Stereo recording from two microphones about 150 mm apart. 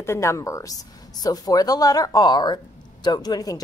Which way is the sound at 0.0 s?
20° left (ahead or behind).